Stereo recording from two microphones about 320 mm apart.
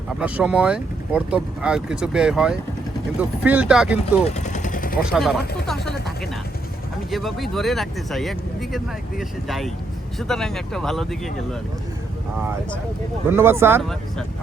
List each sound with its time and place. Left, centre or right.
0.2 s speech: centre
4.2 s vehicle: left
5.1 s speech: centre
7.1 s speech: centre
13.2 s speech: centre